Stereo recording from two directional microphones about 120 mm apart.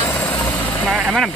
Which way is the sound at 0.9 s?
Centre (ahead or behind).